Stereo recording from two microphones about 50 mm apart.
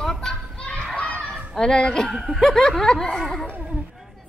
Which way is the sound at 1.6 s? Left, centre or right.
Centre.